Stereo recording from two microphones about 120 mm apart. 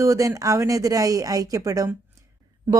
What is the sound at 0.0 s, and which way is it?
Speech, 25° right (ahead or behind).